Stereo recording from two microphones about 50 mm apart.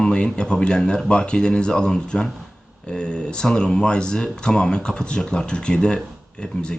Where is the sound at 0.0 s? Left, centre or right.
Centre.